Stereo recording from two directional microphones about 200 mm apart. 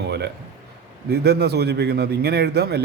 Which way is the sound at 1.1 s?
55° right (ahead or behind).